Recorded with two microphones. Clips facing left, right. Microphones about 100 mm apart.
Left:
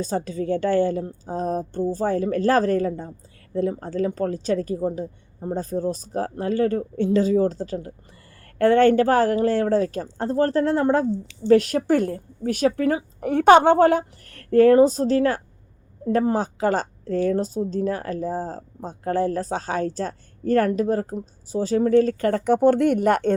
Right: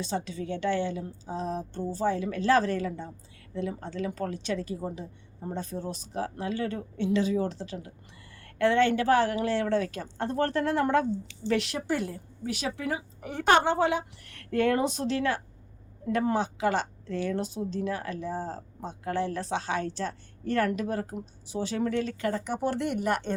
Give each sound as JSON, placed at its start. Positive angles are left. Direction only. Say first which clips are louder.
{"t": 0.0, "sound": "a woman's voice", "louder": "left 7 dB", "side_deg": 40}
{"t": 11.4, "sound": "speech", "louder": "left 11 dB", "side_deg": 45}
{"t": 13.1, "sound": "a woman's voice", "louder": "left 9 dB", "side_deg": 60}
{"t": 22.3, "sound": "speech", "louder": "left 11 dB", "side_deg": 55}